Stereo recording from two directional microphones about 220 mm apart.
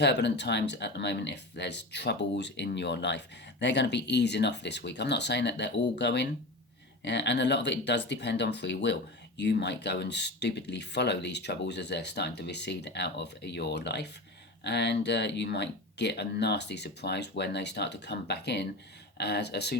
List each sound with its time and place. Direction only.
0.0 s speech: 50° left (ahead or behind)